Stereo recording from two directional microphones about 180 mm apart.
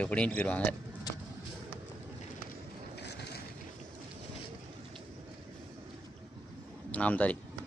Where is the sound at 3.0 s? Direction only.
70° left (ahead or behind).